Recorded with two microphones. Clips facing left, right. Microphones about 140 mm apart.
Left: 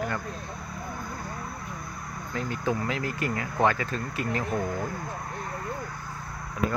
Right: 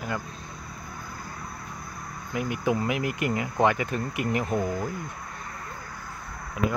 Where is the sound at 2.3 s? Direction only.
15° right (ahead or behind).